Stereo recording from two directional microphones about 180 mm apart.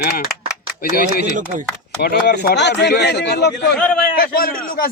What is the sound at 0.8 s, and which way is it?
Speech, 55° left (ahead or behind).